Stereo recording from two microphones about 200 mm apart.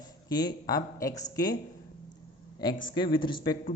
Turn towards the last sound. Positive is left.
turn(degrees=20)  # may be behind; listen again after turning